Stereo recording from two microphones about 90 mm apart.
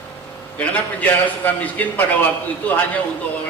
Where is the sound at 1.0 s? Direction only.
20° left (ahead or behind).